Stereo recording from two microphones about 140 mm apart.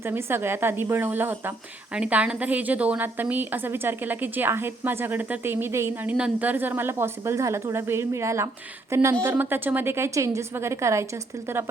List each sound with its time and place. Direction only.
0.0 s a woman's voice: 15° right (ahead or behind)